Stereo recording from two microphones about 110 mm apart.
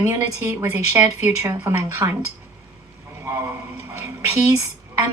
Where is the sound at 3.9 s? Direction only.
25° right (ahead or behind).